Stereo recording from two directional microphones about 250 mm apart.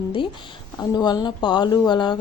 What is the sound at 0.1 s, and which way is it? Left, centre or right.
A woman's voice, centre.